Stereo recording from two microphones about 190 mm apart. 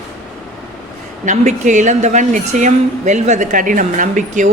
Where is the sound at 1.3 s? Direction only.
40° right (ahead or behind).